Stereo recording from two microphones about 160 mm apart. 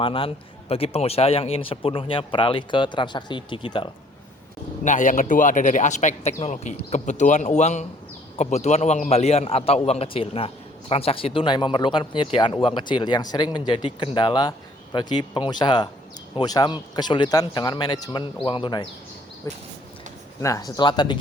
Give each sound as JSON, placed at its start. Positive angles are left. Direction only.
{"t": 0.0, "sound": "a man's voice", "side_deg": 35}
{"t": 4.8, "sound": "a man's voice", "side_deg": 50}
{"t": 19.4, "sound": "speech", "side_deg": 20}